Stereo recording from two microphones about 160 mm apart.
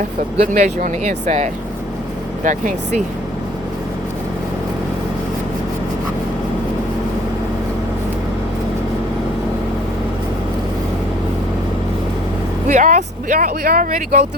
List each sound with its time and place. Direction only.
0.5 s speech: 50° right (ahead or behind)
12.7 s speech: 55° right (ahead or behind)